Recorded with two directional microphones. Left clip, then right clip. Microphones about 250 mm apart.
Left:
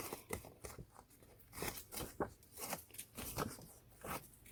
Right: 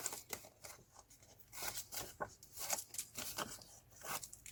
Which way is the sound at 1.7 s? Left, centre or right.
Centre.